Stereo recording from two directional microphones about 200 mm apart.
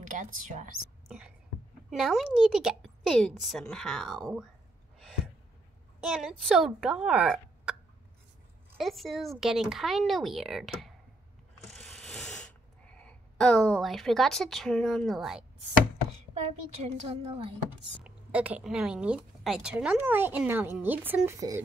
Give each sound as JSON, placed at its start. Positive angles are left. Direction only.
{"t": 0.0, "sound": "a child's voice", "side_deg": -40}
{"t": 1.0, "sound": "a woman's voice", "side_deg": -5}
{"t": 5.9, "sound": "a woman's voice", "side_deg": -5}
{"t": 8.7, "sound": "a woman's voice", "side_deg": 0}
{"t": 11.7, "sound": "a sound", "side_deg": 5}
{"t": 16.3, "sound": "a child's voice", "side_deg": -30}
{"t": 18.0, "sound": "speech", "side_deg": -5}